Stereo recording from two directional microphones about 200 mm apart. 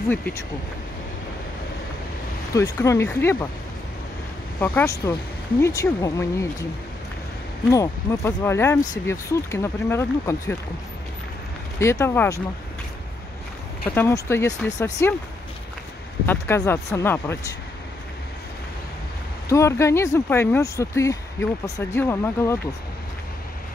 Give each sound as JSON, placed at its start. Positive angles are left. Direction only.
{"t": 0.1, "sound": "speech", "side_deg": 10}
{"t": 2.5, "sound": "speech", "side_deg": 15}
{"t": 4.6, "sound": "speech", "side_deg": 10}
{"t": 7.7, "sound": "speech", "side_deg": 15}
{"t": 11.8, "sound": "speech", "side_deg": 15}
{"t": 13.8, "sound": "speech", "side_deg": 10}
{"t": 16.3, "sound": "speech", "side_deg": 10}
{"t": 19.5, "sound": "speech", "side_deg": 15}